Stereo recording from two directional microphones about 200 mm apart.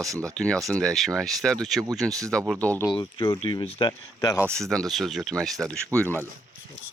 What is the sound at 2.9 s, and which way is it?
Speech, 20° left (ahead or behind).